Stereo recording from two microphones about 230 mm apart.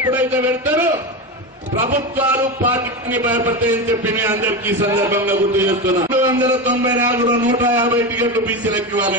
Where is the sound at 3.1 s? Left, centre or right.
Centre.